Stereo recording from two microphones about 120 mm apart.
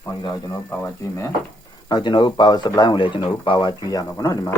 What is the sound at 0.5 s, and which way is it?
Speech, 20° left (ahead or behind).